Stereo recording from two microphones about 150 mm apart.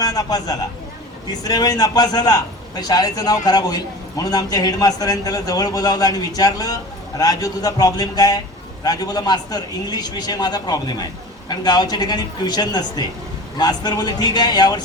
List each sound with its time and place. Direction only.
0.0 s a man's voice: 25° left (ahead or behind)